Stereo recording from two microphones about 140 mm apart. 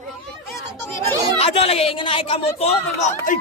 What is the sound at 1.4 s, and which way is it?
A man's voice, 45° left (ahead or behind).